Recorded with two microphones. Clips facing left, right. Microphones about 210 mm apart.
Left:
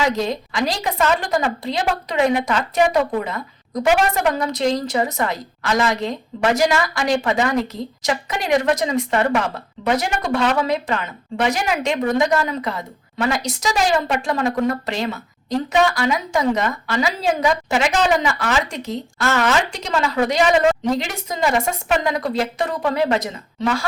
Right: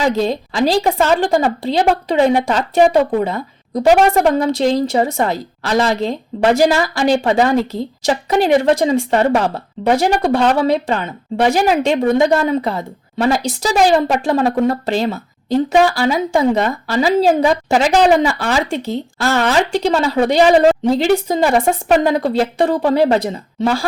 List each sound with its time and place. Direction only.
0.0 s a woman's voice: 30° right (ahead or behind)